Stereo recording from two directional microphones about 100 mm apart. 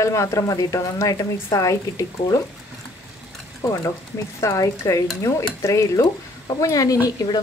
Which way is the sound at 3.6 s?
30° left (ahead or behind).